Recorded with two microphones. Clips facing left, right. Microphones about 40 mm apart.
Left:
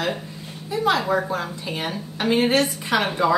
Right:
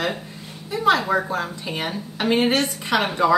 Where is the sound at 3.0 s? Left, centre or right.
Centre.